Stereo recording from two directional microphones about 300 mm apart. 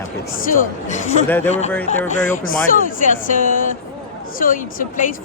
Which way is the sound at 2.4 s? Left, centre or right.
Left.